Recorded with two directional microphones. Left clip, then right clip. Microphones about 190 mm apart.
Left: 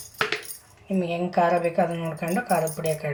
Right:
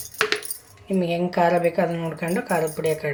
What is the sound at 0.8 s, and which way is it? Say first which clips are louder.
Speech: right 3 dB; 30° right (ahead or behind).